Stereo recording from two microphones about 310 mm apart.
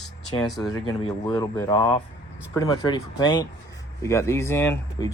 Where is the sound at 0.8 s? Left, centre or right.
Centre.